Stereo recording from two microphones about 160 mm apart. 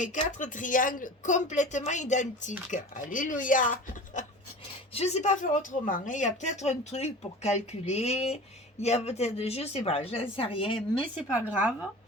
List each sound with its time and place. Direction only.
0.0 s speech: 50° left (ahead or behind); by 10.8 s 35° left (ahead or behind)
11.2 s speech: 10° right (ahead or behind)